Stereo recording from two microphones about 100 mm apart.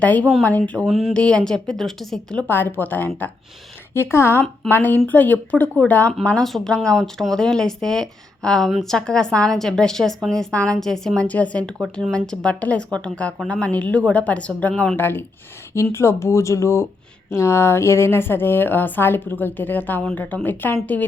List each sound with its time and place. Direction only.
0.0 s a woman's voice: 15° left (ahead or behind)
0.9 s speech: 5° right (ahead or behind)
1.1 s a woman's voice: 10° left (ahead or behind)
2.5 s a woman's voice: 20° left (ahead or behind)